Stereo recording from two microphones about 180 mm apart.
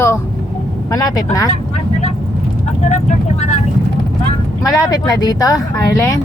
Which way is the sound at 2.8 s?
40° left (ahead or behind).